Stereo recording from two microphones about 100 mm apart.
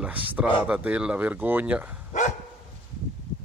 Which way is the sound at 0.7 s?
15° right (ahead or behind).